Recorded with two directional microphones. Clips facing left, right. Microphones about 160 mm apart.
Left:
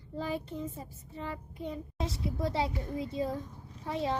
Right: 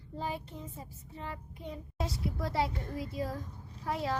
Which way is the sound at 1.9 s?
25° left (ahead or behind).